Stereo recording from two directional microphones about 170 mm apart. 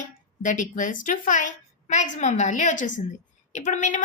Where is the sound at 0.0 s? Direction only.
50° left (ahead or behind).